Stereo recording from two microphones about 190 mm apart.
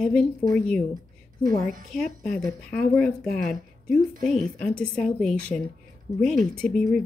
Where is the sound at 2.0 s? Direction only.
5° left (ahead or behind).